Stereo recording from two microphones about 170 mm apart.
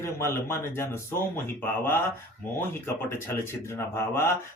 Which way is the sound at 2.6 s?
15° left (ahead or behind).